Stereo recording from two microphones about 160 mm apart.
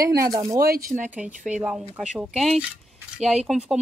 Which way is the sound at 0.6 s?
70° right (ahead or behind).